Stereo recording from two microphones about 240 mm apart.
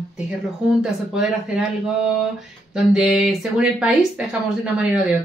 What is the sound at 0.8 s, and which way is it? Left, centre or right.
Speech, centre.